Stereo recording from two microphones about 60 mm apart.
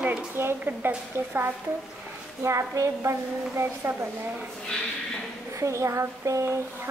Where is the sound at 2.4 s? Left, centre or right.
Right.